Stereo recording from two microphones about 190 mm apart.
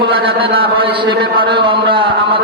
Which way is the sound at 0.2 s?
30° right (ahead or behind).